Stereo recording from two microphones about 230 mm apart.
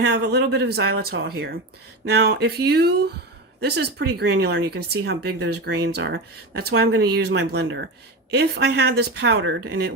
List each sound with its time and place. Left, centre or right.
0.0 s speech: right